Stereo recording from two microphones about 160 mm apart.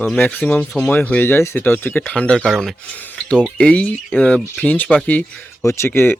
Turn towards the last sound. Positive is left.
turn(degrees=15)  # may be behind; listen again after turning